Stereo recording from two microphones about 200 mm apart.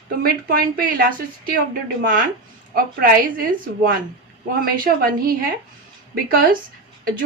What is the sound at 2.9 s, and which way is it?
Speech, 45° right (ahead or behind).